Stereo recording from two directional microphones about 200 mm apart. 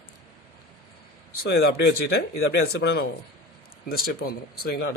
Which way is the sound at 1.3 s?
75° left (ahead or behind).